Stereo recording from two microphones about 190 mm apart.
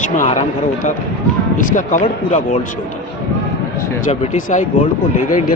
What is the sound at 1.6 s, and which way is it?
A man's voice, 45° left (ahead or behind).